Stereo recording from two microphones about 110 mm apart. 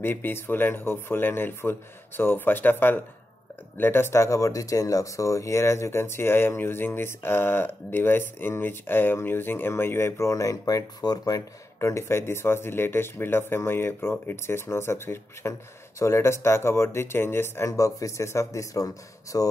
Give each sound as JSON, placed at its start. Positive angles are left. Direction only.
{"t": 0.0, "sound": "speech", "side_deg": 20}